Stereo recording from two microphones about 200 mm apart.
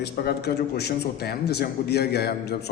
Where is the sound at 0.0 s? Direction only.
55° left (ahead or behind).